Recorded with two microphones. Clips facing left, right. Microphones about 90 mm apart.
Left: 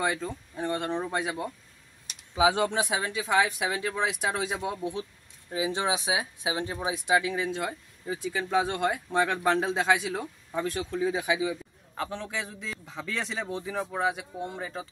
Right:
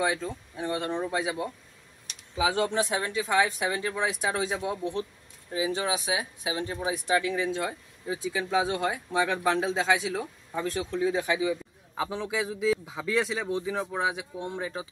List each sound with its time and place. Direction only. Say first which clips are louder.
0.0 s speech: right 1 dB; centre (ahead or behind)
2.3 s speech: left 2 dB; 15° left (ahead or behind); by 4.7 s centre (ahead or behind)
5.5 s speech: even; 25° left (ahead or behind)
7.4 s speech: right 1 dB; centre (ahead or behind)
12.0 s speech: right 4 dB; 10° right (ahead or behind)